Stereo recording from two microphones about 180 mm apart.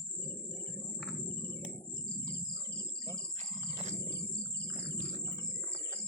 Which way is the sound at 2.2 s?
65° left (ahead or behind).